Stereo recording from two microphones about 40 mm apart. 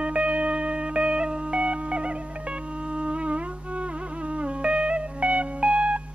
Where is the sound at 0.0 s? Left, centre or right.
Right.